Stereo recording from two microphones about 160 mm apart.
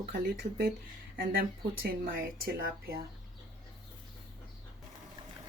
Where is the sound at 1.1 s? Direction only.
65° right (ahead or behind).